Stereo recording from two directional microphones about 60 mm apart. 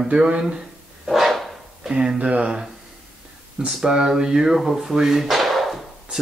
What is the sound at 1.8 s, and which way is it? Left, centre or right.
Speech, centre.